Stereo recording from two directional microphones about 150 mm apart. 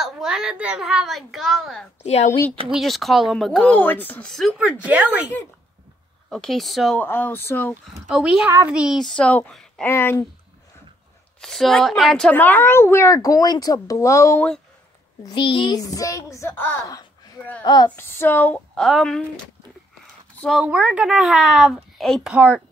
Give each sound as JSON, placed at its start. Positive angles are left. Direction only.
{"t": 0.0, "sound": "speech", "side_deg": -5}
{"t": 2.0, "sound": "speech", "side_deg": 45}
{"t": 2.7, "sound": "speech", "side_deg": 0}
{"t": 4.8, "sound": "speech", "side_deg": -10}
{"t": 6.3, "sound": "speech", "side_deg": 0}
{"t": 7.0, "sound": "speech", "side_deg": 10}
{"t": 8.1, "sound": "speech", "side_deg": -5}
{"t": 9.8, "sound": "speech", "side_deg": 15}
{"t": 11.4, "sound": "speech", "side_deg": 0}
{"t": 15.2, "sound": "a woman's voice", "side_deg": 35}
{"t": 17.6, "sound": "a woman's voice", "side_deg": 30}
{"t": 17.9, "sound": "speech", "side_deg": 15}
{"t": 20.4, "sound": "speech", "side_deg": -5}
{"t": 22.3, "sound": "speech", "side_deg": -10}